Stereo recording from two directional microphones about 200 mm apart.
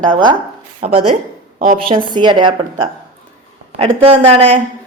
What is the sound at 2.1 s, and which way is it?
A woman's voice, 25° right (ahead or behind).